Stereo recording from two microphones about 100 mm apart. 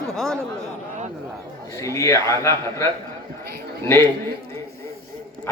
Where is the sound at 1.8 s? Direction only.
30° left (ahead or behind).